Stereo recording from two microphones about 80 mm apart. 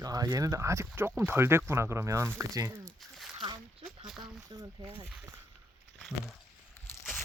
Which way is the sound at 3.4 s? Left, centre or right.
Right.